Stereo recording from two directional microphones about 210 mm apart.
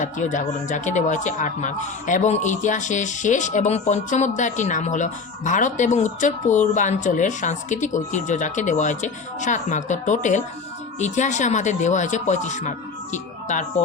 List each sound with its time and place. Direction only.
0.0 s speech: 35° left (ahead or behind)